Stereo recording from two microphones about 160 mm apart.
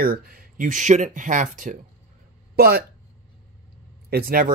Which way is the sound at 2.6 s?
75° right (ahead or behind).